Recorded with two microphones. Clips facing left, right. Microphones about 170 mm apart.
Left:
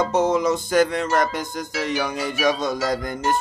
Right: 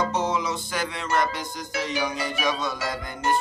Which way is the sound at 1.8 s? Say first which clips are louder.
Left 3 dB; 55° left (ahead or behind).